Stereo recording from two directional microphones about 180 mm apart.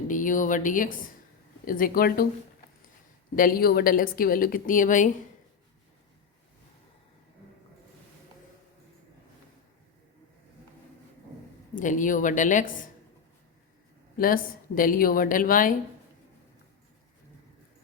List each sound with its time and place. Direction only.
0.1 s a woman's voice: 45° left (ahead or behind)
3.3 s a woman's voice: 55° left (ahead or behind)
11.7 s a woman's voice: 45° left (ahead or behind)
14.2 s a woman's voice: 50° left (ahead or behind)